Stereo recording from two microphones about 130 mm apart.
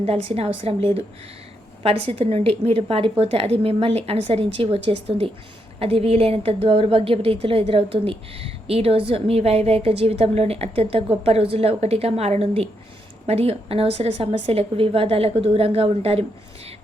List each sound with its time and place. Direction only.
0.0 s a woman's voice: 50° right (ahead or behind)